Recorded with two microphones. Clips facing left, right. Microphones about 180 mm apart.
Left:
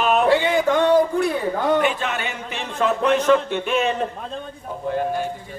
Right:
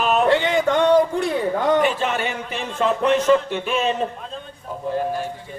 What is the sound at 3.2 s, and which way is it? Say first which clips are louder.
Music: even; 5° right (ahead or behind).